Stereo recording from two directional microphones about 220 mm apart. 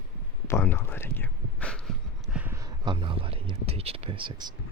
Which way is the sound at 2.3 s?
10° right (ahead or behind).